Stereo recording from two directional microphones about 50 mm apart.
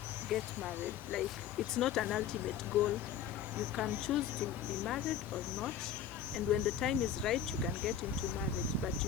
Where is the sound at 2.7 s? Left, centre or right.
Right.